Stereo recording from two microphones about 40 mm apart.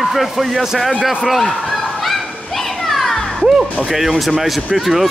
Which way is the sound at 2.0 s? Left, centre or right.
Centre.